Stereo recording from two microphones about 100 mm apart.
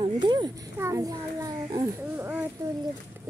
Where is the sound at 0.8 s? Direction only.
30° right (ahead or behind).